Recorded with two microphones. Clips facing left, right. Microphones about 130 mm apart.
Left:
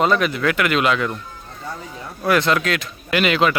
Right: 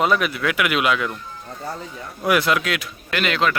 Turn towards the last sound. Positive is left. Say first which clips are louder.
# left 4 dB
turn(degrees=5)  # may be behind; listen again after turning